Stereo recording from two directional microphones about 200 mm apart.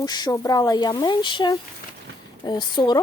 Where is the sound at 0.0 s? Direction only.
20° left (ahead or behind).